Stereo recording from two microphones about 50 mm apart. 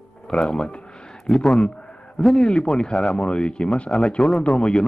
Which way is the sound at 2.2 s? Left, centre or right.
Centre.